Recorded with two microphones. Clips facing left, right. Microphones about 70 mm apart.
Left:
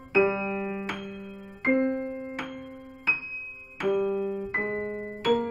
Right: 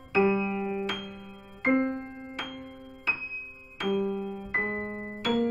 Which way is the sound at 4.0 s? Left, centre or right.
Left.